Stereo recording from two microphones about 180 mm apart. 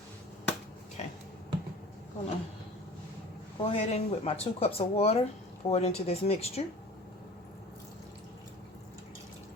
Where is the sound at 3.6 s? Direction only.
35° left (ahead or behind).